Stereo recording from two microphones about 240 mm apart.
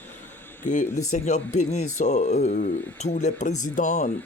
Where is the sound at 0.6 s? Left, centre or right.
Left.